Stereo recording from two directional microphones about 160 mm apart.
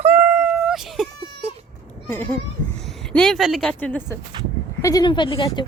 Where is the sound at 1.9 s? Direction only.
15° left (ahead or behind).